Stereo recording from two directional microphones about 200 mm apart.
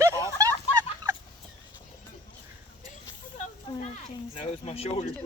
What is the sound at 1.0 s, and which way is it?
Turkey, 20° right (ahead or behind).